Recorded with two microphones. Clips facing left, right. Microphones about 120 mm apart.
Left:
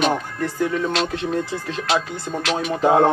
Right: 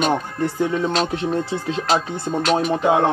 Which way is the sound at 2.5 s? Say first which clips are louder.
Right 5 dB; 40° right (ahead or behind).